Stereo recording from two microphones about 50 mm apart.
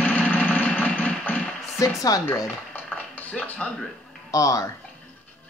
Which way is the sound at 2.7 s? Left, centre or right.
Left.